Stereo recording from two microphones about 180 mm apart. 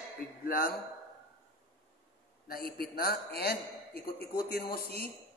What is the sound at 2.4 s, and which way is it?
A man's voice, 55° left (ahead or behind).